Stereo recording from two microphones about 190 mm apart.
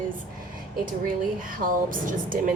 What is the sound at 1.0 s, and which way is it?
Speech, 45° right (ahead or behind).